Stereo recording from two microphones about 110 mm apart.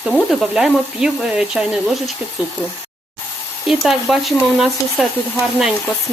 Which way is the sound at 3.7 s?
Centre (ahead or behind).